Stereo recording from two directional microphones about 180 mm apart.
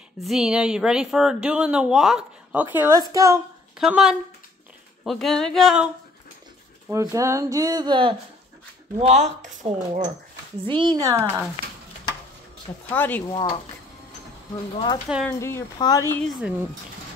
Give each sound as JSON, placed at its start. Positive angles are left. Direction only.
{"t": 0.2, "sound": "a woman's voice", "side_deg": 0}
{"t": 3.7, "sound": "a woman's voice", "side_deg": -5}
{"t": 6.9, "sound": "speech", "side_deg": -15}
{"t": 8.9, "sound": "speech", "side_deg": -40}
{"t": 10.7, "sound": "speech", "side_deg": -25}
{"t": 12.9, "sound": "speech", "side_deg": 10}
{"t": 13.3, "sound": "speech", "side_deg": 30}
{"t": 15.2, "sound": "speech", "side_deg": 15}
{"t": 16.2, "sound": "a woman's voice", "side_deg": 0}